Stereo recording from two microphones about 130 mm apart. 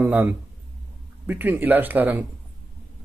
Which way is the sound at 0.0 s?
15° right (ahead or behind).